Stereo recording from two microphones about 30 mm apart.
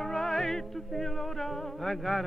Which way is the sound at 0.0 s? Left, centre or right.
Centre.